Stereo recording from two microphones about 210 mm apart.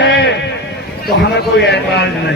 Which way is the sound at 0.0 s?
55° left (ahead or behind).